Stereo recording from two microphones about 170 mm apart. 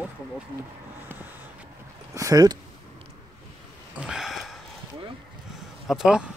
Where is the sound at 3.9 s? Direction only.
5° right (ahead or behind).